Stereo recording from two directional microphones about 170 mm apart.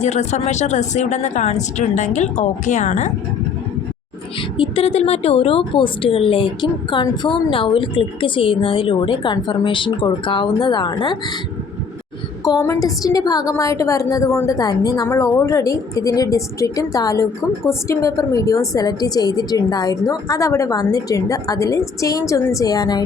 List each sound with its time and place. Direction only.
0.0 s speech: 40° left (ahead or behind)
4.5 s a woman's voice: 30° left (ahead or behind)
12.5 s a woman's voice: 20° left (ahead or behind)